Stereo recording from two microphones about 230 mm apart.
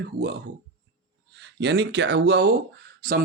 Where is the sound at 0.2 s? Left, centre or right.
Right.